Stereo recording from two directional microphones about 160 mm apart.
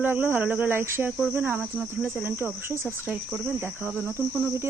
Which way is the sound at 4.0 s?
10° left (ahead or behind).